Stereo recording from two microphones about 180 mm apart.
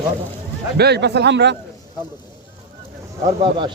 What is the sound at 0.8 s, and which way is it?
Speech, 65° right (ahead or behind).